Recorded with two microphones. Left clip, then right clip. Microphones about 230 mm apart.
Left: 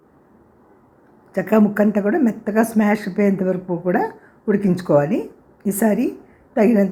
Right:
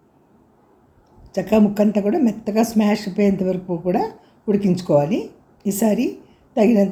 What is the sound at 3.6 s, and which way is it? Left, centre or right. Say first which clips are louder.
Speech: left 1 dB; left.